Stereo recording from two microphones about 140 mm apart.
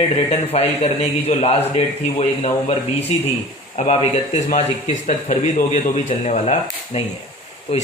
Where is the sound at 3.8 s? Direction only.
50° left (ahead or behind).